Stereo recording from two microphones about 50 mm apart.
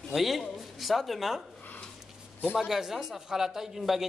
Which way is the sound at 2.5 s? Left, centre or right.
Centre.